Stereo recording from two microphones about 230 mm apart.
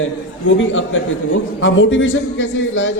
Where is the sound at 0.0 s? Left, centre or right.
Left.